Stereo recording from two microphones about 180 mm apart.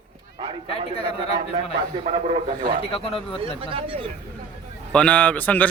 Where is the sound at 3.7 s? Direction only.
30° right (ahead or behind).